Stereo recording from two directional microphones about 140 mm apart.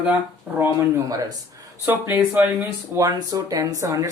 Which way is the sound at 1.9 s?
15° right (ahead or behind).